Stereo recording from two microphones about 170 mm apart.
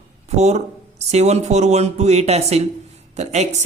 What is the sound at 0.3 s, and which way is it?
Speech, 40° right (ahead or behind).